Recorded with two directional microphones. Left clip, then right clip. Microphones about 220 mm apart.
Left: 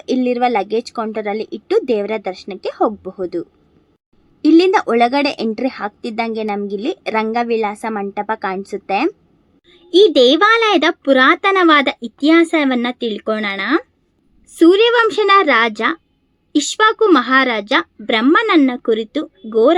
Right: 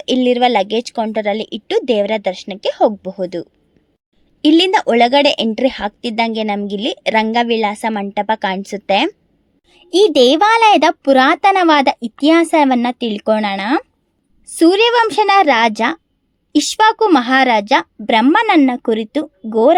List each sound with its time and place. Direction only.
0.0 s a woman's voice: 25° right (ahead or behind)